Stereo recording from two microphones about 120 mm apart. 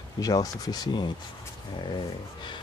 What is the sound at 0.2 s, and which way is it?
Speech, 30° left (ahead or behind).